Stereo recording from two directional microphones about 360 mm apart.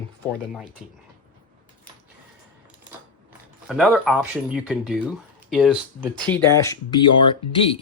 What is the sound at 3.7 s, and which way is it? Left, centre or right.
Speech, centre.